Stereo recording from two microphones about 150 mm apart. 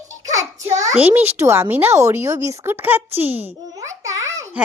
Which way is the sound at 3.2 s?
40° right (ahead or behind).